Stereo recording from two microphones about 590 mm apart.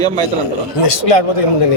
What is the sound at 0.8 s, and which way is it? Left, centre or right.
Speech, left.